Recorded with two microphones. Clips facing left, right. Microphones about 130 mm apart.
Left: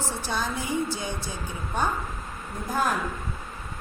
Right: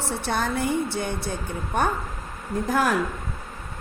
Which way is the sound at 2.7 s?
90° right.